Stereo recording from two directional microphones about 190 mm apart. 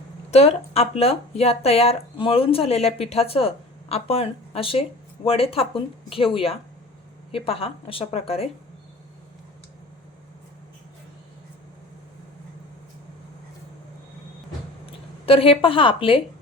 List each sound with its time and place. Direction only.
0.3 s speech: 35° left (ahead or behind)
15.3 s a woman's voice: 30° left (ahead or behind)